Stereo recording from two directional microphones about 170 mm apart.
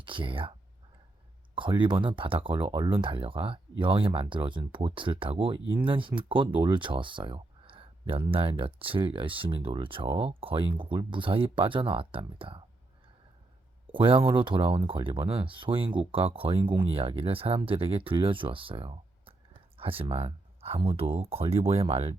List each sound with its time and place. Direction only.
0.0 s speech: 30° right (ahead or behind)
1.5 s speech: 30° right (ahead or behind)
13.9 s speech: 30° right (ahead or behind)